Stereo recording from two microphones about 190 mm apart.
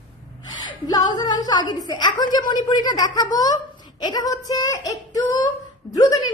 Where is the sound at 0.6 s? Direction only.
20° left (ahead or behind).